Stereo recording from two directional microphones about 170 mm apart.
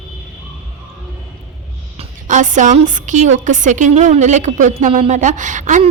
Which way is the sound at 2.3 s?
50° right (ahead or behind).